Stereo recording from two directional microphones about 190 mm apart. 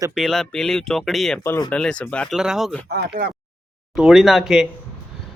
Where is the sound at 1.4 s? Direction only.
15° left (ahead or behind).